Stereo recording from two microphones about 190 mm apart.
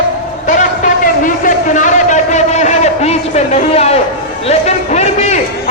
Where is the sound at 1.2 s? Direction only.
45° left (ahead or behind).